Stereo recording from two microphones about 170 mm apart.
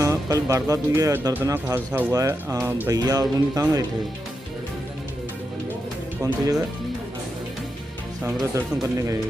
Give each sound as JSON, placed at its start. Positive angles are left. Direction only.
{"t": 0.0, "sound": "speech", "side_deg": -20}
{"t": 6.2, "sound": "speech", "side_deg": -20}
{"t": 8.5, "sound": "speech", "side_deg": -20}